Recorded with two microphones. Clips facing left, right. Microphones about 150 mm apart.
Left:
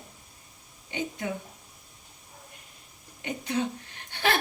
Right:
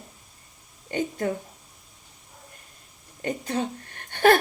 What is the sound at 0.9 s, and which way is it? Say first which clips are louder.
Speech: right 6 dB; 45° right (ahead or behind).